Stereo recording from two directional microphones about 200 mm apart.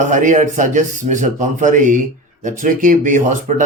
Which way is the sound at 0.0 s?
40° right (ahead or behind).